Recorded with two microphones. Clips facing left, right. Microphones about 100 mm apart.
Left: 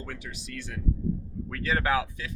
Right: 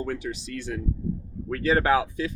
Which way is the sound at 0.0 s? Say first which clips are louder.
Right 9 dB; 35° right (ahead or behind).